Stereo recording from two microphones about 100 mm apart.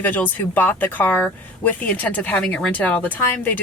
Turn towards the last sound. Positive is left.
turn(degrees=20)  # may be behind; listen again after turning